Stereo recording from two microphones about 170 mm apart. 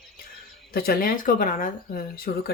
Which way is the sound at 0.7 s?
60° left (ahead or behind).